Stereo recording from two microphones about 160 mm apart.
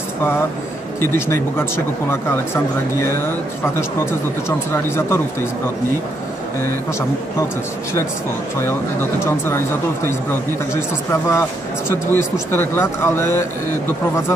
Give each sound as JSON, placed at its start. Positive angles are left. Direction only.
{"t": 1.1, "sound": "speech", "side_deg": 15}
{"t": 10.7, "sound": "speech", "side_deg": 20}